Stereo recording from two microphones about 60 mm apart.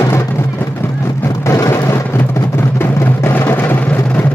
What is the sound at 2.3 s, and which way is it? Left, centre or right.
Music, left.